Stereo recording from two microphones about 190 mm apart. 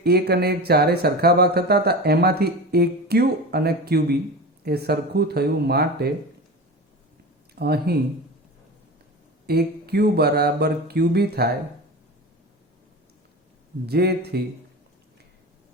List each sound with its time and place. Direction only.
0.0 s speech: 55° right (ahead or behind)
7.6 s speech: 55° right (ahead or behind)
9.5 s speech: 55° right (ahead or behind)
13.8 s speech: 55° right (ahead or behind)